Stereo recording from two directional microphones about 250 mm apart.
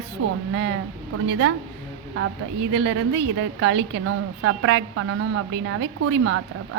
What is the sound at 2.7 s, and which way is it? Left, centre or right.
A woman's voice, right.